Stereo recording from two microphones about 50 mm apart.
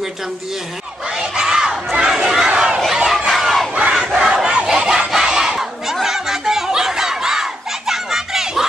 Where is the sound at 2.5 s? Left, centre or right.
Centre.